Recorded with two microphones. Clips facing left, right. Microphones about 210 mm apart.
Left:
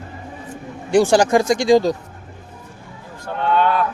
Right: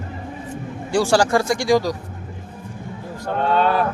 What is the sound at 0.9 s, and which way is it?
Speech, 20° left (ahead or behind).